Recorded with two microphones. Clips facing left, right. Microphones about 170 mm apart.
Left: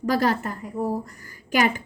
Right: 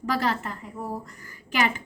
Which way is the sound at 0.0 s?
40° left (ahead or behind).